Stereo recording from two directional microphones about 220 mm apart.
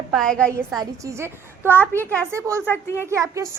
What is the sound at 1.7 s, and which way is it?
Speech, 10° left (ahead or behind).